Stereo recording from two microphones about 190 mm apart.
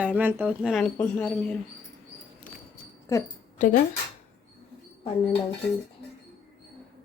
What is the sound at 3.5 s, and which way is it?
Speech, 40° left (ahead or behind).